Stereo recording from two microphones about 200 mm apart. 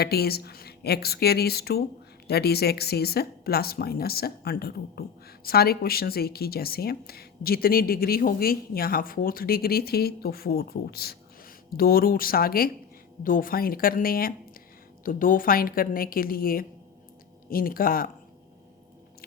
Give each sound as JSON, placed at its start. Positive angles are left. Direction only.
{"t": 0.0, "sound": "speech", "side_deg": 50}